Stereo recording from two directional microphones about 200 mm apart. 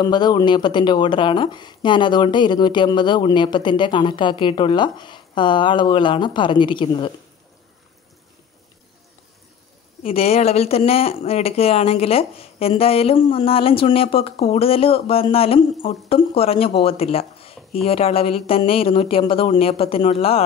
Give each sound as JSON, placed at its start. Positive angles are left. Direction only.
{"t": 0.0, "sound": "speech", "side_deg": 20}
{"t": 10.0, "sound": "speech", "side_deg": 30}